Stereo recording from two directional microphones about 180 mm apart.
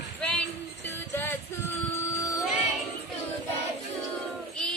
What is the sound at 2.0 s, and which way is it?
Music, 15° left (ahead or behind).